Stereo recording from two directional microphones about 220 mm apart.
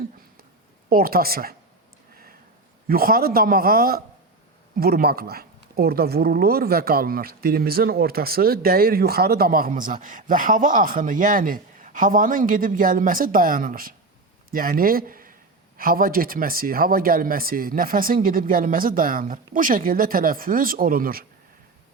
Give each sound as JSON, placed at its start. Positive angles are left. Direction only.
{"t": 0.9, "sound": "speech", "side_deg": -40}
{"t": 2.8, "sound": "speech", "side_deg": -40}